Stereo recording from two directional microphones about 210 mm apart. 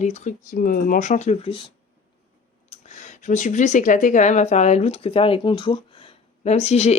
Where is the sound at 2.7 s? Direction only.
35° left (ahead or behind).